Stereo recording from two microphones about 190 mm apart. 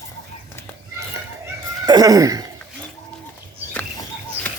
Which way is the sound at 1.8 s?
20° right (ahead or behind).